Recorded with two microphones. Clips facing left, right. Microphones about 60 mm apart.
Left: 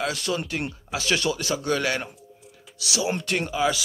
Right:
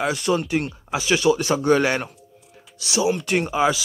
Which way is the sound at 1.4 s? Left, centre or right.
Right.